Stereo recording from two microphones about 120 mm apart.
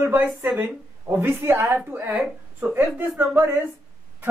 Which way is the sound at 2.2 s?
5° right (ahead or behind).